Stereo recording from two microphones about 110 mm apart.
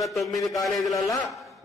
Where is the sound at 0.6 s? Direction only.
Centre (ahead or behind).